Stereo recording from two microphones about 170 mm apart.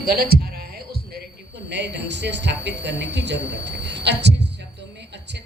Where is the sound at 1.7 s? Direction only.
90° right.